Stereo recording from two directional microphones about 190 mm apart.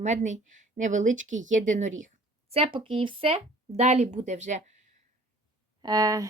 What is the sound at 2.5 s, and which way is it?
Speech, 30° right (ahead or behind).